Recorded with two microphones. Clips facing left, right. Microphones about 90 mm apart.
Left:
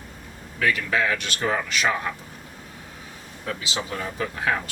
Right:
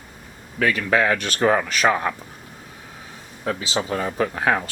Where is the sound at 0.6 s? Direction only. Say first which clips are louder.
Right 4 dB; 40° right (ahead or behind).